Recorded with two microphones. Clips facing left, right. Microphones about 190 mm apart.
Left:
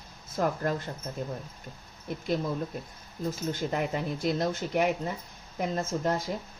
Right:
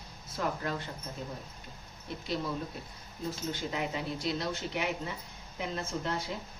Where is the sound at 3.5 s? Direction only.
50° left (ahead or behind).